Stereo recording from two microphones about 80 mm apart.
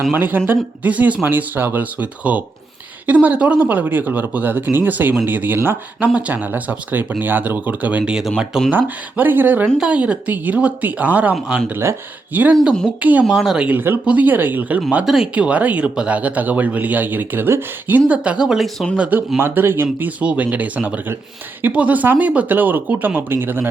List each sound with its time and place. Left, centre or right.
0.1 s a man's voice: right
9.7 s a man's voice: centre
11.7 s speech: right
12.3 s a man's voice: right
13.2 s speech: centre
13.7 s a man's voice: right
14.8 s speech: centre
15.4 s a man's voice: centre
18.1 s speech: centre
18.9 s speech: centre
19.4 s a man's voice: right